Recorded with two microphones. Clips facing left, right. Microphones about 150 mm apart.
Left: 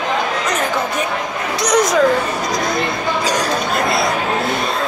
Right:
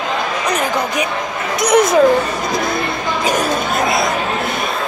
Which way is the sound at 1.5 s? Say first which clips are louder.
Right 3 dB; 25° right (ahead or behind).